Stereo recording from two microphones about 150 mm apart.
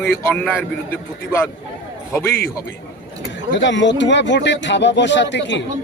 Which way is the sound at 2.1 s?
15° left (ahead or behind).